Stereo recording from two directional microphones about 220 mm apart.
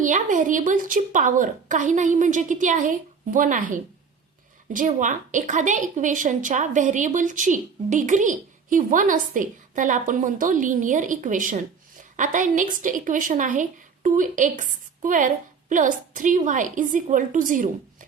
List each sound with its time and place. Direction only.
0.0 s a woman's voice: 35° right (ahead or behind)